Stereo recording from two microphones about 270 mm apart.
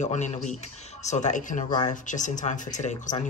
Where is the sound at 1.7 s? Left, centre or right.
Centre.